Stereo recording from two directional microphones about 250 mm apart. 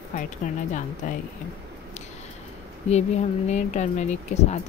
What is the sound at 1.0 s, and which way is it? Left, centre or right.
Speech, left.